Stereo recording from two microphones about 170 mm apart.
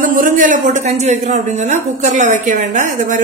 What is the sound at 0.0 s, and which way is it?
A man's voice, 55° right (ahead or behind).